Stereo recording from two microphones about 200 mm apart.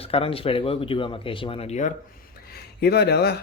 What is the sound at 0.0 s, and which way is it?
Speech, 30° left (ahead or behind).